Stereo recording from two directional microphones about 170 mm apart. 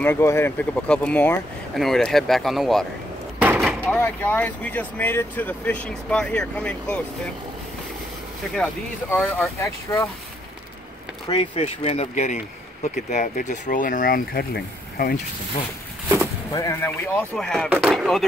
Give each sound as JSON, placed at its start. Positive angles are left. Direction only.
{"t": 0.0, "sound": "speech", "side_deg": 15}
{"t": 3.3, "sound": "a sound", "side_deg": -5}
{"t": 3.8, "sound": "speech", "side_deg": 10}
{"t": 8.5, "sound": "speech", "side_deg": 5}
{"t": 11.2, "sound": "speech", "side_deg": 35}
{"t": 16.5, "sound": "speech", "side_deg": 15}